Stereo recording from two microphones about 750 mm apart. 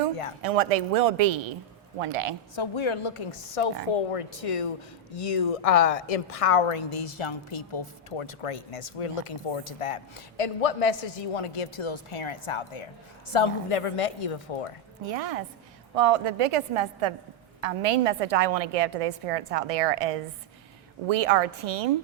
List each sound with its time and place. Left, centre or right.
0.4 s a woman's voice: right
2.6 s a woman's voice: left
15.0 s a woman's voice: right